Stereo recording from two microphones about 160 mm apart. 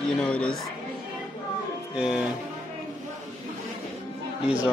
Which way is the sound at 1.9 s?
5° right (ahead or behind).